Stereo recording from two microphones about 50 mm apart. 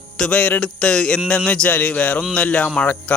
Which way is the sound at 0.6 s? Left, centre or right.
Centre.